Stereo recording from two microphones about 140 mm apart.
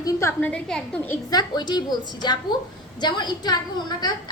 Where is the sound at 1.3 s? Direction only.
30° left (ahead or behind).